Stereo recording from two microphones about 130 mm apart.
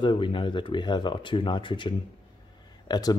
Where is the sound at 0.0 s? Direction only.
40° left (ahead or behind).